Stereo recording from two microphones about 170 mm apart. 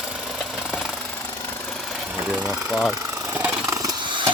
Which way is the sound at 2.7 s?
5° right (ahead or behind).